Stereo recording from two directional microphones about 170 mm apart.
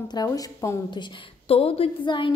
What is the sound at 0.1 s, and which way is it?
Speech, 20° left (ahead or behind).